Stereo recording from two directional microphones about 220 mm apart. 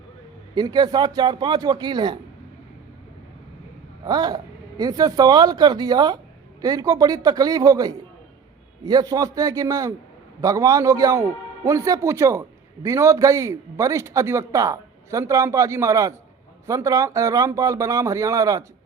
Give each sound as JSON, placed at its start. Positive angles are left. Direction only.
{"t": 0.5, "sound": "speech", "side_deg": -20}
{"t": 4.0, "sound": "a man's voice", "side_deg": -20}